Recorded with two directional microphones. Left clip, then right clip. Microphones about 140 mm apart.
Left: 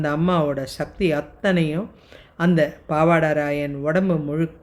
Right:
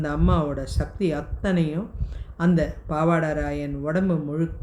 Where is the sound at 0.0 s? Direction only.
45° left (ahead or behind).